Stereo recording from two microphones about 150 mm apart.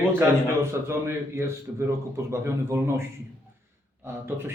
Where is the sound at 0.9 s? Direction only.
20° right (ahead or behind).